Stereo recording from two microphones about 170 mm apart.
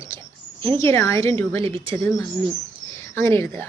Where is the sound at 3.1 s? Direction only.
15° left (ahead or behind).